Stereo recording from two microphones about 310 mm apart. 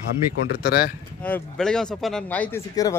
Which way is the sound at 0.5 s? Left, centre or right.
Left.